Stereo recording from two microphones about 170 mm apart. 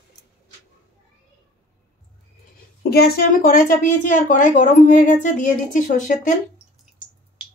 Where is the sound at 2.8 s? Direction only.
70° left (ahead or behind); by 6.3 s 50° left (ahead or behind).